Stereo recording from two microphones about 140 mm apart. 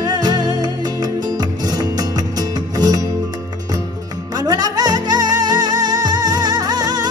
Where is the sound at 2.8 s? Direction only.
30° right (ahead or behind).